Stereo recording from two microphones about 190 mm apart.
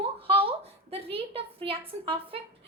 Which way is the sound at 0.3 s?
30° right (ahead or behind).